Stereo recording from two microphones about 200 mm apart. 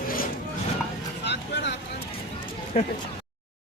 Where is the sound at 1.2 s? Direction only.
60° left (ahead or behind).